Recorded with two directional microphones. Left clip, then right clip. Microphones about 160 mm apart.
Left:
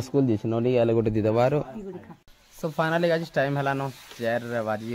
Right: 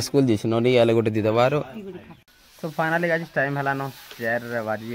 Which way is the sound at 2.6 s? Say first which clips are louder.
Right 1 dB; 10° left (ahead or behind).